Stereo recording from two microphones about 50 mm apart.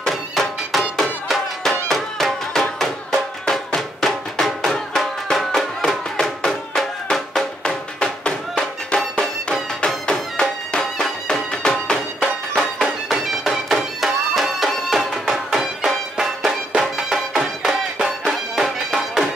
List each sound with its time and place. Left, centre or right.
0.0 s music: centre
7.6 s music: centre
13.1 s music: centre